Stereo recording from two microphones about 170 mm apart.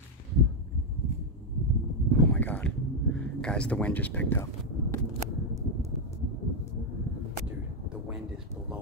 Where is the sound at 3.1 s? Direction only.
5° left (ahead or behind).